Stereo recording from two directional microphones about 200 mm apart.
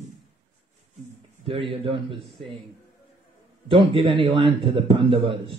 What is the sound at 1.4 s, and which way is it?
Speech, 25° right (ahead or behind).